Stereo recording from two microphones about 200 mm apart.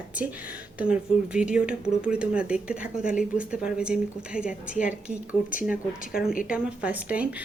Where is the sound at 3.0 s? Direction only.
40° left (ahead or behind).